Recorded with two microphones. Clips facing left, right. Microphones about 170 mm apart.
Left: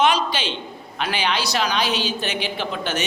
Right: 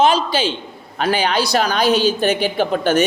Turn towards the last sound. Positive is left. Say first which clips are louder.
# right 10 dB
turn(degrees=-50)  # may be behind; listen again after turning